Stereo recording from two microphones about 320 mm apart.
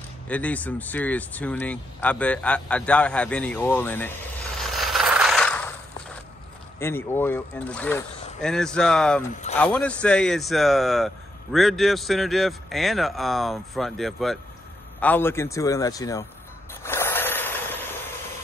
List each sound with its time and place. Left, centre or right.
0.3 s speech: centre
4.6 s a sound: centre
6.8 s speech: centre
9.3 s speech: left
9.6 s a man's voice: centre
16.8 s a sound: centre